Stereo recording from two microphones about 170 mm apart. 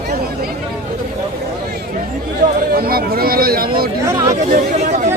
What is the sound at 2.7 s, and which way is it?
Speech, 65° right (ahead or behind).